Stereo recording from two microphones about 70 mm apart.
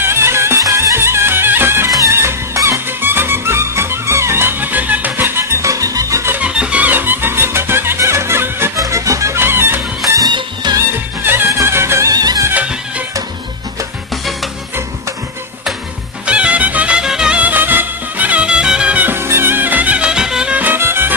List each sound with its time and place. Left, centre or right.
0.0 s music: right
3.0 s music: right
6.4 s music: centre; by 8.7 s right
8.7 s music: right
9.4 s music: right
10.0 s music: right
10.8 s music: right
12.1 s music: right
12.5 s music: centre
16.3 s music: centre
19.1 s music: right; by 20.7 s centre
20.7 s music: right